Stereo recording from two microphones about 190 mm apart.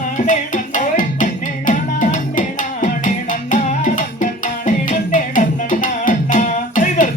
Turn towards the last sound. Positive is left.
turn(degrees=40)  # may be behind; listen again after turning